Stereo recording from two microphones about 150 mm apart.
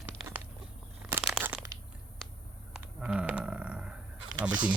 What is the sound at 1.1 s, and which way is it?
Crumpling, 10° right (ahead or behind).